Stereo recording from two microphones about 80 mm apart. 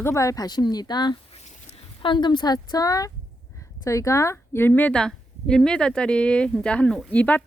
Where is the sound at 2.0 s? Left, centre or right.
Left.